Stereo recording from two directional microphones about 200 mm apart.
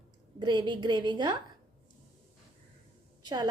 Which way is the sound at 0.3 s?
20° right (ahead or behind).